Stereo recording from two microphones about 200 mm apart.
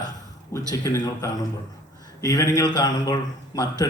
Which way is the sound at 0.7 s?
15° left (ahead or behind).